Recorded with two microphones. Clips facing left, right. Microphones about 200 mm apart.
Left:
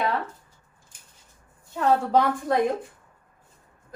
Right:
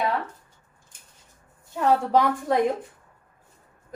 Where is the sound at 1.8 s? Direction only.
15° right (ahead or behind).